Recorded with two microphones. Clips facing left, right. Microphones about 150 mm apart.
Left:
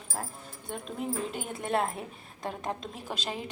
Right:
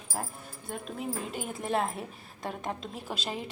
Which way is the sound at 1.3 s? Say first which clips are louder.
Even; centre (ahead or behind).